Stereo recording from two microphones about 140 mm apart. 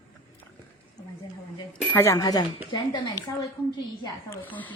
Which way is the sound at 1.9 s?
20° left (ahead or behind).